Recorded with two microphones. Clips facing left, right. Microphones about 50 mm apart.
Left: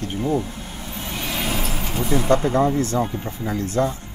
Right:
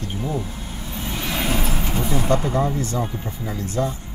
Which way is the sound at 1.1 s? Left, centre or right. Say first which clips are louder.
Right 1 dB; centre.